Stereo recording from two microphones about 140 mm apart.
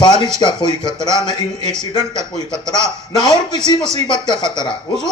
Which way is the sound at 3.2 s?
30° left (ahead or behind).